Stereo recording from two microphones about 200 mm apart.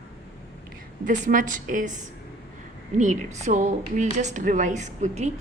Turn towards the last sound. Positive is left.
turn(degrees=-35)  # may be behind; listen again after turning